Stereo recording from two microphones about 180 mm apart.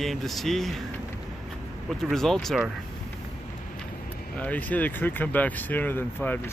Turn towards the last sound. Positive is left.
turn(degrees=10)  # may be behind; listen again after turning